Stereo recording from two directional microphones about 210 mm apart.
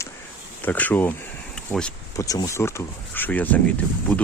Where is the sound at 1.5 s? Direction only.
5° left (ahead or behind).